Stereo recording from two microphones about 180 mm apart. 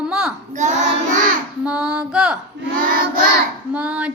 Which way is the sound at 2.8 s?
50° right (ahead or behind).